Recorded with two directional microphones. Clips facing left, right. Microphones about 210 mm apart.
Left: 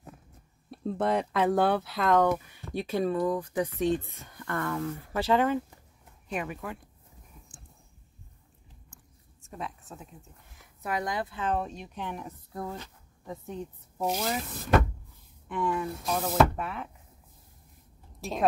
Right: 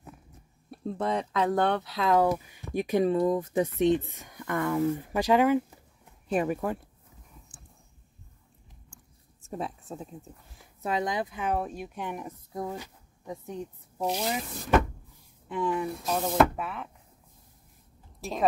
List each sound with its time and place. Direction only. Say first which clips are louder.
0.7 s speech: left 2 dB; centre (ahead or behind)
6.2 s speech: right 7 dB; 35° right (ahead or behind)
9.9 s speech: right 7 dB; 30° right (ahead or behind); by 14.0 s 10° right (ahead or behind)
14.0 s speech: even; centre (ahead or behind)
15.4 s speech: right 1 dB; 20° right (ahead or behind)
15.8 s speech: right 1 dB; 5° right (ahead or behind)
18.2 s a woman's voice: even; centre (ahead or behind)